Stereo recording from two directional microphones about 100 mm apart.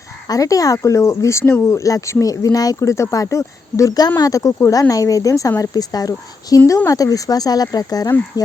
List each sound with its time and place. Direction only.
0.3 s speech: 35° left (ahead or behind)